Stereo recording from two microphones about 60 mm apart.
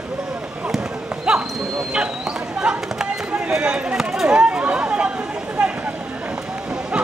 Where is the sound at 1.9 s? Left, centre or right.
Centre.